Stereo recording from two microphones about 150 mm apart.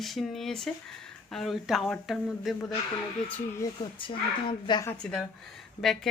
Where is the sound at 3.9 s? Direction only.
35° left (ahead or behind).